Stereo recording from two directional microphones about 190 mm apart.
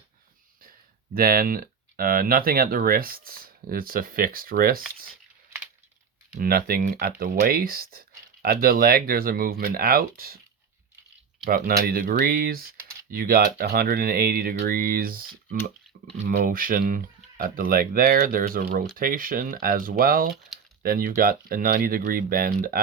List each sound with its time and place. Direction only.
1.1 s speech: 50° right (ahead or behind)
6.3 s speech: 50° right (ahead or behind)
11.4 s speech: 50° right (ahead or behind)
20.5 s typing: centre (ahead or behind)
20.8 s speech: 50° right (ahead or behind)